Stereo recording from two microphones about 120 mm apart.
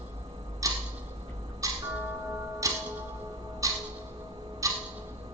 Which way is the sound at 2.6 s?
30° right (ahead or behind).